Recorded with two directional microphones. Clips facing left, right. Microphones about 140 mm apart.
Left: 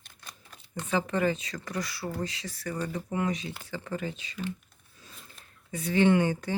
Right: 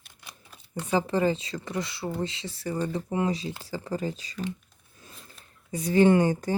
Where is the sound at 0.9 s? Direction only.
30° right (ahead or behind).